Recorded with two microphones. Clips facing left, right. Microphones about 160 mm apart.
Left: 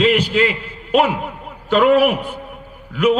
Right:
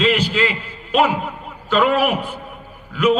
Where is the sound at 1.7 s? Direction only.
60° left (ahead or behind).